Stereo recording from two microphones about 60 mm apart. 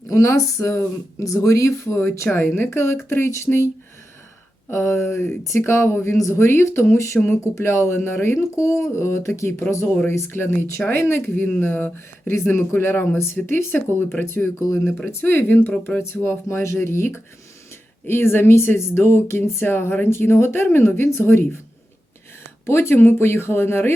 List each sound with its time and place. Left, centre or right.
0.1 s speech: left
4.7 s speech: left
11.6 s speech: left
22.6 s speech: left